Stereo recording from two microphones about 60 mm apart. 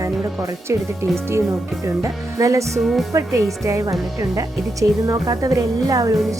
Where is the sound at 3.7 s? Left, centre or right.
Right.